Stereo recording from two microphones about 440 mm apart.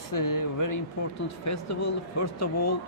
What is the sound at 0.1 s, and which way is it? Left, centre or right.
Speech, left.